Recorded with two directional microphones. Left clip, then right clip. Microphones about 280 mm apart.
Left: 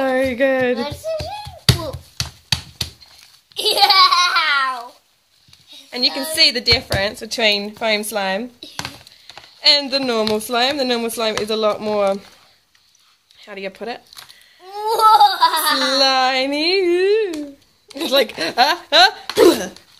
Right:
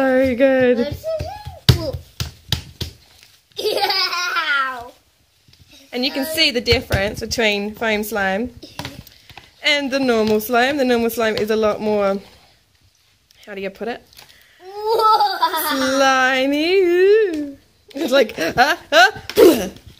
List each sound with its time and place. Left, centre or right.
0.0 s speech: centre
3.6 s laughter: centre
5.9 s a sound: centre
6.3 s speech: centre
13.4 s speech: centre